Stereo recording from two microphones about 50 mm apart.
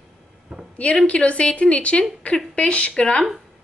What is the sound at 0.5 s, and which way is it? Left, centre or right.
Speech, centre.